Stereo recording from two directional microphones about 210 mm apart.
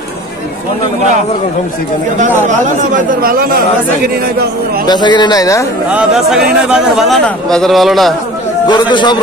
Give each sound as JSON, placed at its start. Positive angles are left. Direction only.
{"t": 2.1, "sound": "speech", "side_deg": -35}
{"t": 4.8, "sound": "a man's voice", "side_deg": 20}
{"t": 5.9, "sound": "a man's voice", "side_deg": -5}
{"t": 8.6, "sound": "a man's voice", "side_deg": 20}